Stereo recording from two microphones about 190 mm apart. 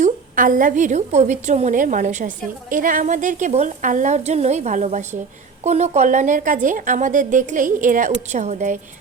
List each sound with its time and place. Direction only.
0.0 s a woman's voice: 45° right (ahead or behind)